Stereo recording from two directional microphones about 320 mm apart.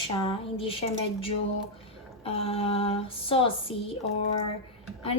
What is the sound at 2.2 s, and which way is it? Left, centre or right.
A woman's voice, centre.